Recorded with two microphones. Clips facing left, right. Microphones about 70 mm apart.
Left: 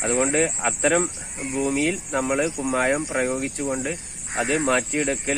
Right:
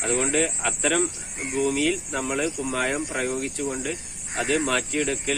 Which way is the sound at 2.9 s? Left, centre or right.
Centre.